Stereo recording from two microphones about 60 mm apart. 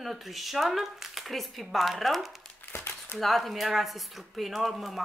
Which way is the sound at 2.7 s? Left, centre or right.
Left.